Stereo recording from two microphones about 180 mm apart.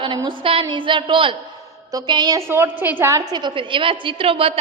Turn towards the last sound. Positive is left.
turn(degrees=-30)  # may be behind; listen again after turning